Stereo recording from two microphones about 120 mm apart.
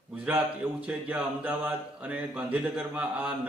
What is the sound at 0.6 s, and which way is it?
Speech, 20° right (ahead or behind).